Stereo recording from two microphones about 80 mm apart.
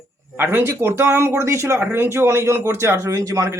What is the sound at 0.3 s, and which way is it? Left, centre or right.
Speech, right.